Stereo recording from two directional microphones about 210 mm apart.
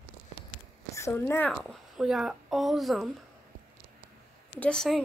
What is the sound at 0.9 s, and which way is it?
Speech, 10° left (ahead or behind).